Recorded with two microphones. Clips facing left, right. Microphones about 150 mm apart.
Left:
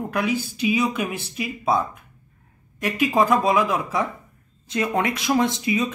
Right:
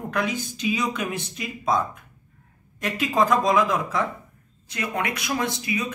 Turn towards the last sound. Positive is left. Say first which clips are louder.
# left 6 dB
turn(degrees=25)  # may be behind; listen again after turning